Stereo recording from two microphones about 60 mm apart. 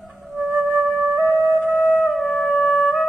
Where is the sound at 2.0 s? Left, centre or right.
Centre.